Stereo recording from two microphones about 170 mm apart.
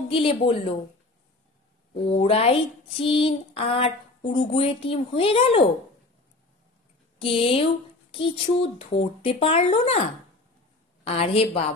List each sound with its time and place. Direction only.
0.1 s speech: 35° left (ahead or behind)
2.0 s speech: 35° left (ahead or behind)
7.2 s speech: 30° left (ahead or behind)
11.1 s speech: 35° left (ahead or behind)